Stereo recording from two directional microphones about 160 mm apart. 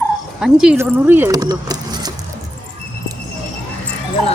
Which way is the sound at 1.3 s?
25° right (ahead or behind).